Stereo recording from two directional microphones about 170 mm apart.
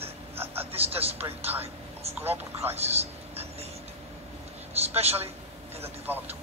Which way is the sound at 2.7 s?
40° right (ahead or behind).